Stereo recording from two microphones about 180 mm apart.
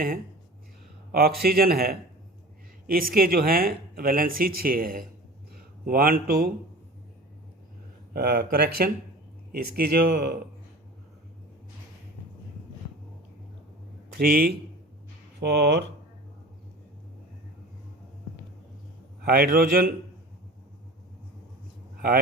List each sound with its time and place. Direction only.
1.1 s speech: 60° right (ahead or behind)
8.1 s speech: 60° right (ahead or behind)
14.1 s speech: 55° right (ahead or behind)
19.2 s speech: 55° right (ahead or behind)